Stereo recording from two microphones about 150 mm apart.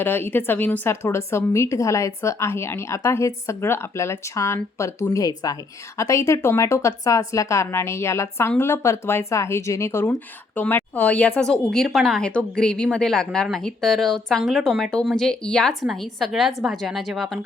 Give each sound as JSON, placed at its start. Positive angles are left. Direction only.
{"t": 0.0, "sound": "a woman's voice", "side_deg": 15}